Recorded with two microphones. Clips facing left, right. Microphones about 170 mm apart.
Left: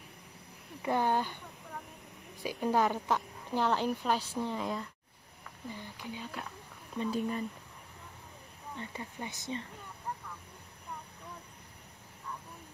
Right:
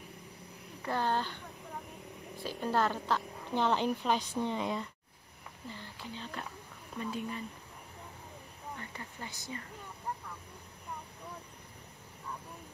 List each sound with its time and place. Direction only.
0.8 s a woman's voice: 15° left (ahead or behind)
2.4 s a woman's voice: 15° left (ahead or behind)
3.5 s speech: 5° left (ahead or behind)
5.7 s a woman's voice: 15° left (ahead or behind)
7.1 s speech: 35° left (ahead or behind)
8.7 s speech: 20° left (ahead or behind)